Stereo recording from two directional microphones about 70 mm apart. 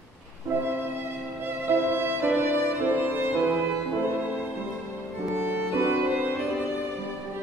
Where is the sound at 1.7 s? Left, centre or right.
Right.